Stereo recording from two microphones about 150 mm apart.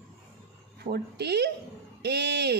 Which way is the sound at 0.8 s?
90° right.